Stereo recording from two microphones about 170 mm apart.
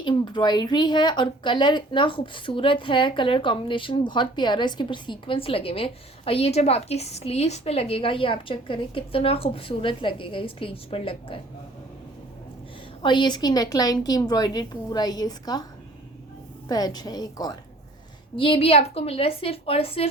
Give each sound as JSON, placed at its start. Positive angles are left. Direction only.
{"t": 0.0, "sound": "a woman's voice", "side_deg": 25}
{"t": 13.0, "sound": "a woman's voice", "side_deg": 25}
{"t": 16.6, "sound": "a woman's voice", "side_deg": 25}